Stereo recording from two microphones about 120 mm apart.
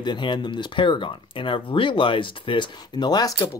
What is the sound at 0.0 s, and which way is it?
Speech, 40° left (ahead or behind).